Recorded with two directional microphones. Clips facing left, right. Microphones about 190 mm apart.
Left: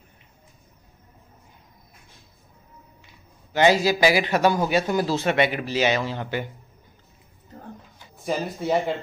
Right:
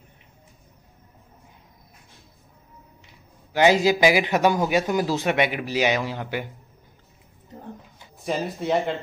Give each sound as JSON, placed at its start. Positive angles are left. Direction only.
{"t": 3.5, "sound": "speech", "side_deg": -15}
{"t": 8.2, "sound": "speech", "side_deg": 0}